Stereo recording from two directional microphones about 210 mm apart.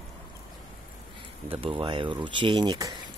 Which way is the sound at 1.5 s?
25° right (ahead or behind).